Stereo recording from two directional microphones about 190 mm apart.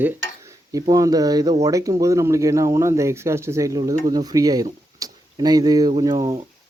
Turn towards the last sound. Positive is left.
turn(degrees=-20)  # may be behind; listen again after turning